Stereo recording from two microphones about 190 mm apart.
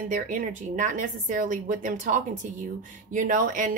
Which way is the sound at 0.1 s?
45° right (ahead or behind).